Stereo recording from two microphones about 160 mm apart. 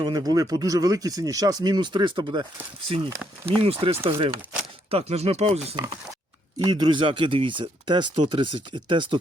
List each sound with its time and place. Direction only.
0.0 s speech: 25° right (ahead or behind); by 5.7 s 40° right (ahead or behind)
6.6 s speech: 25° right (ahead or behind)